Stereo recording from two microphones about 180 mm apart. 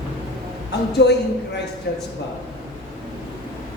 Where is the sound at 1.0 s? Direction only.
70° left (ahead or behind).